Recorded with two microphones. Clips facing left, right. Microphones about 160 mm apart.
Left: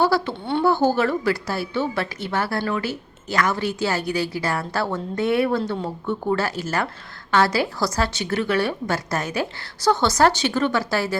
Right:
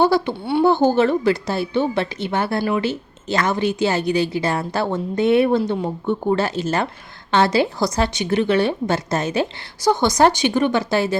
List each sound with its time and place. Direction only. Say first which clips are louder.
0.0 s a woman's voice: right 3 dB; 20° right (ahead or behind)